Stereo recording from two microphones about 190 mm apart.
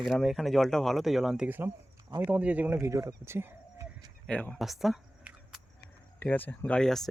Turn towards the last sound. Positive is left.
turn(degrees=5)  # may be behind; listen again after turning